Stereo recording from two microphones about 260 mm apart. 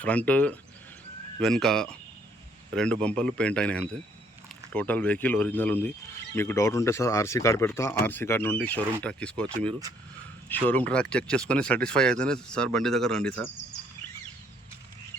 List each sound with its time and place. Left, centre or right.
0.0 s speech: centre